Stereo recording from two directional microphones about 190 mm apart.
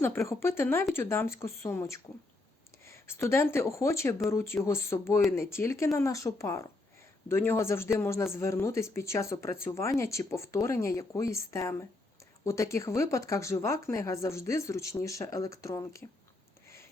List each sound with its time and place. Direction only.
0.3 s speech: 15° left (ahead or behind)
2.8 s a sound: 15° left (ahead or behind)
3.2 s speech: 15° left (ahead or behind)